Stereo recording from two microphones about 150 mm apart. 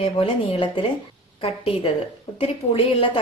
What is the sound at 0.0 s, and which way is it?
A woman's voice, 40° left (ahead or behind).